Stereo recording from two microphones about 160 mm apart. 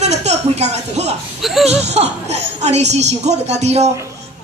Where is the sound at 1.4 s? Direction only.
Centre (ahead or behind).